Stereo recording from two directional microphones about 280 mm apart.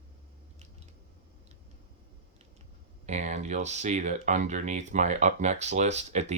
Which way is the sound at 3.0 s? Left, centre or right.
Right.